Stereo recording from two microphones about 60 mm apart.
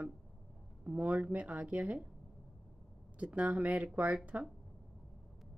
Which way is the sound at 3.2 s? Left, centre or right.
Right.